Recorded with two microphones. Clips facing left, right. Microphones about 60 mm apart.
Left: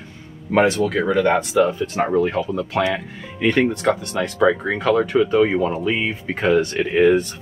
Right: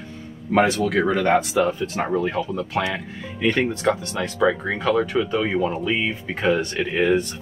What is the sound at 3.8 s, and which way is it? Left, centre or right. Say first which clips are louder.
Speech: left 2 dB; centre.